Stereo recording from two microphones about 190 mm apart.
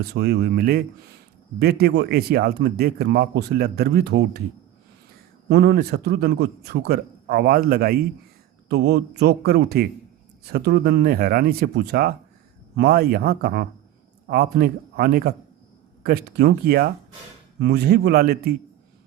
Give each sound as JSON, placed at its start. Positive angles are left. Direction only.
{"t": 0.0, "sound": "a man's voice", "side_deg": -60}
{"t": 5.5, "sound": "a man's voice", "side_deg": -60}